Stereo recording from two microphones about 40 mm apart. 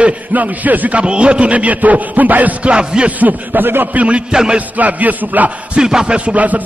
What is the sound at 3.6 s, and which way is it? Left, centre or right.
Speech, right.